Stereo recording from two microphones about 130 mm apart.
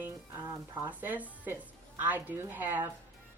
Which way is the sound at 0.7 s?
15° right (ahead or behind).